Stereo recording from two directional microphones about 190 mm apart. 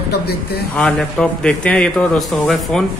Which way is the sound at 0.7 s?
5° left (ahead or behind).